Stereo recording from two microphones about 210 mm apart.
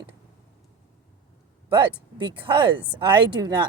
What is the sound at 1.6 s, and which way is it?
Speech, 20° right (ahead or behind).